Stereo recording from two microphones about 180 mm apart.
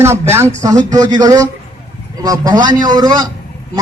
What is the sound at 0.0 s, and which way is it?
A man's voice, 15° right (ahead or behind).